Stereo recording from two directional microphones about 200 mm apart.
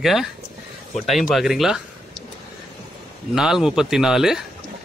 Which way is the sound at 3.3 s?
Centre (ahead or behind).